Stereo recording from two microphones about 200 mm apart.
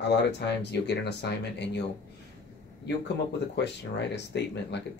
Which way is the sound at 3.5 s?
60° left (ahead or behind).